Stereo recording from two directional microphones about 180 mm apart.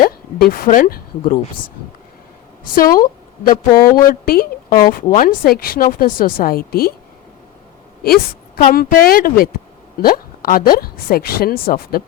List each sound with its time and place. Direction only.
0.0 s a sound: 55° left (ahead or behind)
1.3 s speech: 45° left (ahead or behind)
2.7 s a woman's voice: 50° left (ahead or behind)
8.7 s a woman's voice: 55° left (ahead or behind)